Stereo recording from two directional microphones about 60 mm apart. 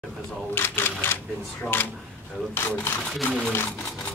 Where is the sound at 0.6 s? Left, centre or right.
Left.